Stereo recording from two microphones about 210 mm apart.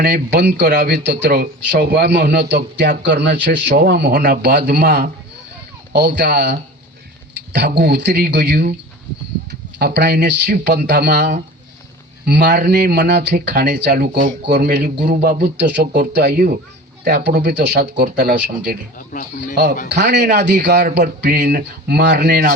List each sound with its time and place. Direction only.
0.0 s a man's voice: 50° right (ahead or behind)
19.1 s speech: 40° left (ahead or behind)
19.9 s a man's voice: 50° right (ahead or behind)